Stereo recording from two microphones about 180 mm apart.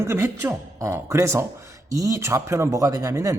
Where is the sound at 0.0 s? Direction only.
15° right (ahead or behind).